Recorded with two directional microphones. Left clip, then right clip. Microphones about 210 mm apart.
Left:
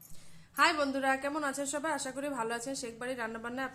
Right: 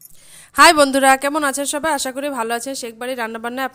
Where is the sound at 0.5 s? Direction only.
50° right (ahead or behind).